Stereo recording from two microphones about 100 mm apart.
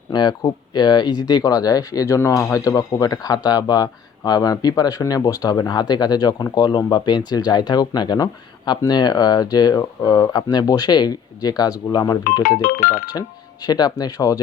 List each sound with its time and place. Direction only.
0.1 s speech: 45° left (ahead or behind)